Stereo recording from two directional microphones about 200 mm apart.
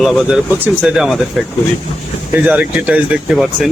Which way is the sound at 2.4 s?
5° right (ahead or behind).